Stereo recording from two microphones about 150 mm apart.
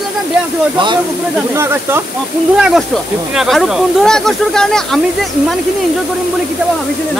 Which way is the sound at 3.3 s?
Centre (ahead or behind).